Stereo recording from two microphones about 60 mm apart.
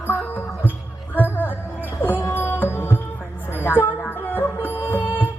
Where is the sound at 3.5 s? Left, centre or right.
Left.